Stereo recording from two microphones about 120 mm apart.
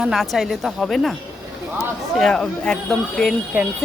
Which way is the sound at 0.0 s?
Centre (ahead or behind).